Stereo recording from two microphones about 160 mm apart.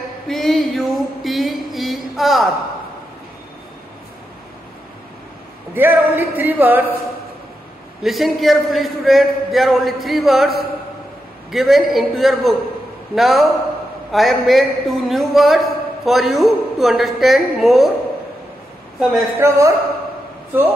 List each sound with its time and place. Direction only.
0.3 s a sound: centre (ahead or behind)
5.8 s speech: 10° right (ahead or behind)
8.0 s a man's voice: centre (ahead or behind)
11.5 s a man's voice: centre (ahead or behind)
18.9 s a man's voice: centre (ahead or behind)
19.3 s speech: 15° right (ahead or behind)